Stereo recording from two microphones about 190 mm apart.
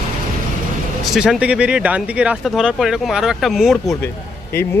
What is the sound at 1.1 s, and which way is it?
Speech, 5° right (ahead or behind).